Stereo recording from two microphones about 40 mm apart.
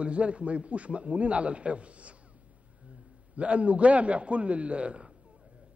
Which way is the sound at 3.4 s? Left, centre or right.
Right.